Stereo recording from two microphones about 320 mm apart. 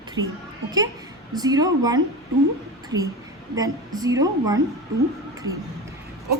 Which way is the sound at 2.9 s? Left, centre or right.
Right.